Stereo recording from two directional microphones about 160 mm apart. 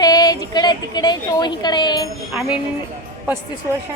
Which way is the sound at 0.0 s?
25° left (ahead or behind).